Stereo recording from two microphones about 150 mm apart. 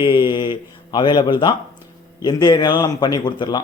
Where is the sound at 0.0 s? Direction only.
30° left (ahead or behind).